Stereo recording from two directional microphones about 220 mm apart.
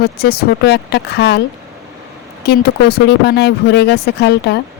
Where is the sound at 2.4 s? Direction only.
45° left (ahead or behind).